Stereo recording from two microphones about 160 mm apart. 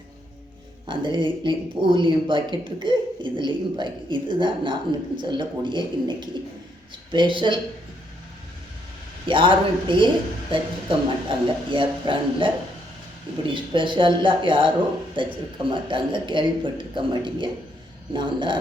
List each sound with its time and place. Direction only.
0.9 s speech: 30° right (ahead or behind)
9.2 s a man's voice: 30° right (ahead or behind)